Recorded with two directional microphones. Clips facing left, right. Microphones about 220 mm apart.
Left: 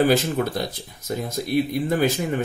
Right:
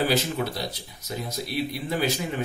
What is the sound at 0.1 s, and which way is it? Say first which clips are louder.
Speech: left 5 dB; 50° left (ahead or behind).